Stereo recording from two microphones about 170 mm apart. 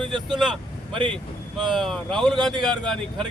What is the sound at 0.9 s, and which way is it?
Speech, 30° right (ahead or behind).